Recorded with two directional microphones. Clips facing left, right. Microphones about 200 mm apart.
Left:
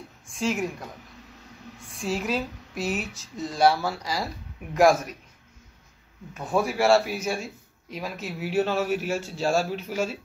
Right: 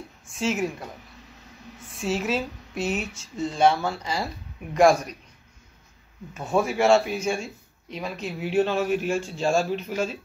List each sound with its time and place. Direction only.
0.3 s a man's voice: centre (ahead or behind)
1.9 s a man's voice: centre (ahead or behind)
6.3 s a man's voice: centre (ahead or behind)